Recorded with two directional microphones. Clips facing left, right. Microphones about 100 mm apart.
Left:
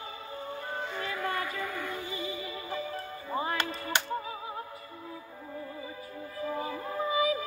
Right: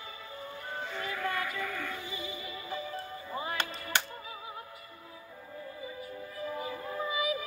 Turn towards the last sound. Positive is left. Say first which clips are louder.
# left 4 dB
turn(degrees=30)  # may be behind; listen again after turning